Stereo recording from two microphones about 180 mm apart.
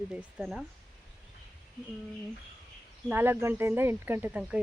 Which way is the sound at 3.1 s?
10° right (ahead or behind).